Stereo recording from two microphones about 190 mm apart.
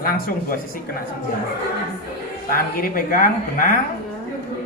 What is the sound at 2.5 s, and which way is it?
Speech, 45° left (ahead or behind).